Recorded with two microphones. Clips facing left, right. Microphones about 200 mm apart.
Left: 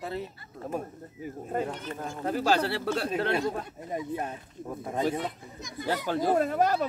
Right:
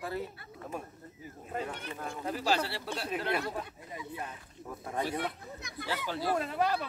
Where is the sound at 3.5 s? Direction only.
45° left (ahead or behind).